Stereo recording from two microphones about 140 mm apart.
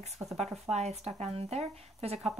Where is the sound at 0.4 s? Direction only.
50° right (ahead or behind).